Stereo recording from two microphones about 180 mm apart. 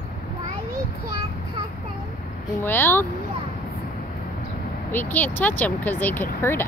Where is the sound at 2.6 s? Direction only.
10° left (ahead or behind).